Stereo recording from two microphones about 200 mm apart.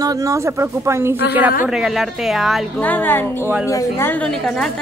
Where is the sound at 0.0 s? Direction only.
15° right (ahead or behind).